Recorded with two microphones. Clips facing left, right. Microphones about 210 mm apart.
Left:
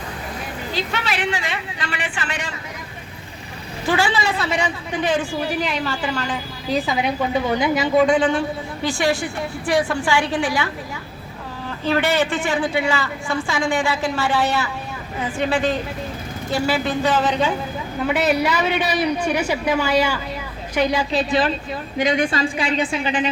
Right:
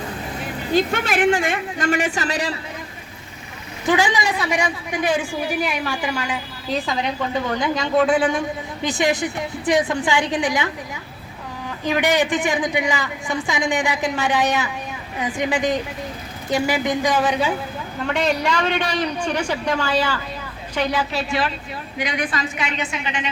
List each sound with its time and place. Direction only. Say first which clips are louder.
0.7 s a man's voice: right 7 dB; 50° right (ahead or behind)
3.8 s a woman's voice: right 1 dB; 15° right (ahead or behind)
6.7 s a man's voice: left 2 dB; centre (ahead or behind)
8.0 s a woman's voice: left 1 dB; 5° right (ahead or behind)
11.9 s a woman's voice: even; 15° right (ahead or behind)
18.0 s a man's voice: left 2 dB; 5° left (ahead or behind); by 23.3 s 35° left (ahead or behind)